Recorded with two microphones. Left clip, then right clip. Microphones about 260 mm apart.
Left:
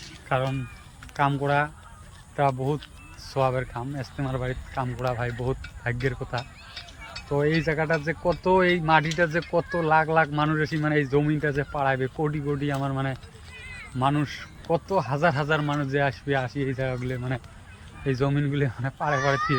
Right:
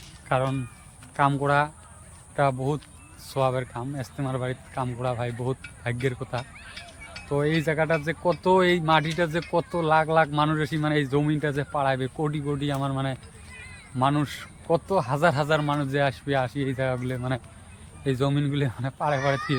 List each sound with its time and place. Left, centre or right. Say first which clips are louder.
0.3 s a man's voice: right 1 dB; centre
6.7 s a sound: left 1 dB; left
7.3 s a man's voice: left 1 dB; centre